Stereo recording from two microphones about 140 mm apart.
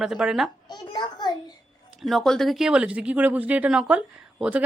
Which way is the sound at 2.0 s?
Centre (ahead or behind).